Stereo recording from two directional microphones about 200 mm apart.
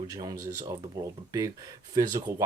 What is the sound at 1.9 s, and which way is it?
Speech, 20° right (ahead or behind).